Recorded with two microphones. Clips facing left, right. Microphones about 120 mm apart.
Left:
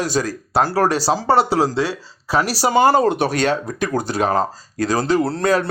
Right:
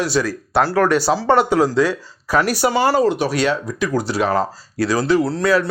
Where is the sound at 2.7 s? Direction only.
45° left (ahead or behind).